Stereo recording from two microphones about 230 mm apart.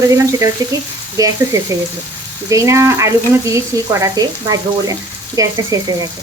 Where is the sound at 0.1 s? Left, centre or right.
Centre.